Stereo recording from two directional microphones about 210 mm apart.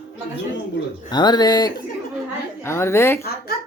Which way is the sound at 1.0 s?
20° left (ahead or behind).